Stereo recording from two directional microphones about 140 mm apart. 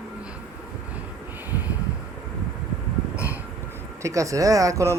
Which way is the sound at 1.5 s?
15° right (ahead or behind).